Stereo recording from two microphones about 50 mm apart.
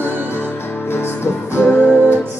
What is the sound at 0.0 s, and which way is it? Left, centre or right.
Music, right.